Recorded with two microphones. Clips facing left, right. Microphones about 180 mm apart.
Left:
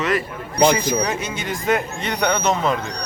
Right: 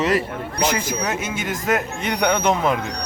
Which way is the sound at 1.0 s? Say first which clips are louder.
Left 1 dB; 5° right (ahead or behind).